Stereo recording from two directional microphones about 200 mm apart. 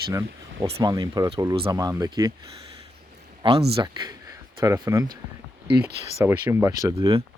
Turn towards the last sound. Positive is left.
turn(degrees=-30)  # may be behind; listen again after turning